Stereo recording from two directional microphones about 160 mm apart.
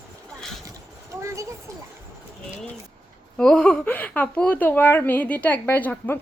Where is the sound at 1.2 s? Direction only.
20° right (ahead or behind).